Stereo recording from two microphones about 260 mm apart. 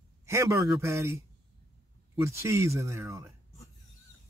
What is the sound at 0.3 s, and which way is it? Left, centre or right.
Speech, centre.